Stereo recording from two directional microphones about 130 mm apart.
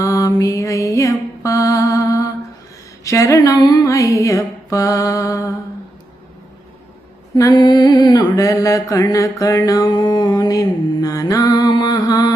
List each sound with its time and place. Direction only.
0.0 s mantra: 25° left (ahead or behind)
7.3 s mantra: 30° left (ahead or behind)